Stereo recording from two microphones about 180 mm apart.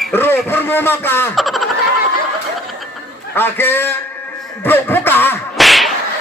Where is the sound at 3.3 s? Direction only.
10° left (ahead or behind).